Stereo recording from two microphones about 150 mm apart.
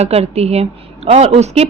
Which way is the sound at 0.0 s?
45° right (ahead or behind).